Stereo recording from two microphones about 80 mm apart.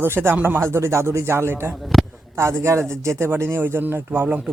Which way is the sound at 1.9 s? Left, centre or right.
Centre.